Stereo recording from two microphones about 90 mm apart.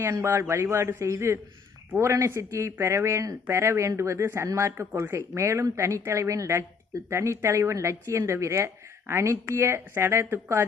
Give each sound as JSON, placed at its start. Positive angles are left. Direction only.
{"t": 0.0, "sound": "speech", "side_deg": -35}